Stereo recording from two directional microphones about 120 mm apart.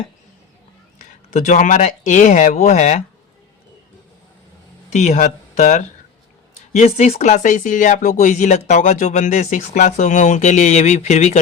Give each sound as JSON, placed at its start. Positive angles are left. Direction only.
{"t": 1.3, "sound": "speech", "side_deg": 85}
{"t": 4.9, "sound": "speech", "side_deg": 70}
{"t": 6.7, "sound": "speech", "side_deg": 65}